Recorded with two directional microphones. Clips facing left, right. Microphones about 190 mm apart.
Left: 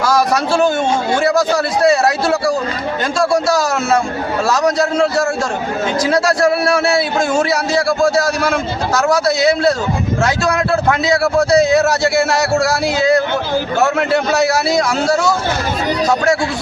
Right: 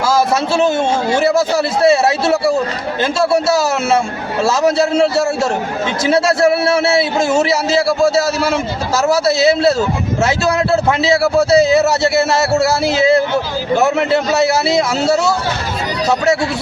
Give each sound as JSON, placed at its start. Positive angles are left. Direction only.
{"t": 0.0, "sound": "a sound", "side_deg": -25}
{"t": 1.2, "sound": "a man's voice", "side_deg": -25}
{"t": 4.8, "sound": "a man's voice", "side_deg": -25}
{"t": 9.0, "sound": "a man's voice", "side_deg": -25}
{"t": 14.4, "sound": "a man's voice", "side_deg": -25}